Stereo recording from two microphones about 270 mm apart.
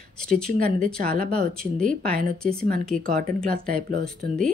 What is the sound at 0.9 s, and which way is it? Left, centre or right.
Speech, right.